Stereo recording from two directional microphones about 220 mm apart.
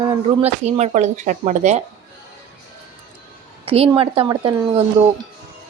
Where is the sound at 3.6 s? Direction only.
25° right (ahead or behind).